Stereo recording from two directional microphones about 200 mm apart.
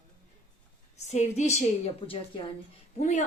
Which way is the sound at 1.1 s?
35° left (ahead or behind).